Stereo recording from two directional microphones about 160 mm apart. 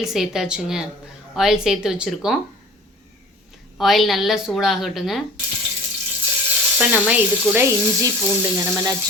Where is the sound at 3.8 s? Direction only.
Centre (ahead or behind).